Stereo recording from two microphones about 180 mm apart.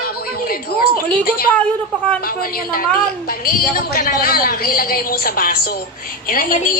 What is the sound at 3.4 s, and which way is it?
A woman's voice, 55° left (ahead or behind).